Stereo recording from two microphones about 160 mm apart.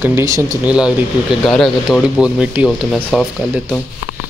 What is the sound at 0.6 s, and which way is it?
Speech, 5° right (ahead or behind).